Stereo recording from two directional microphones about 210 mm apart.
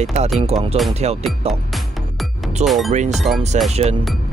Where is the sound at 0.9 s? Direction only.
30° right (ahead or behind).